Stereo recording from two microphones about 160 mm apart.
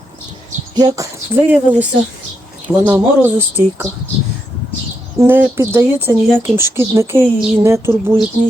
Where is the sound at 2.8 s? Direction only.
10° right (ahead or behind).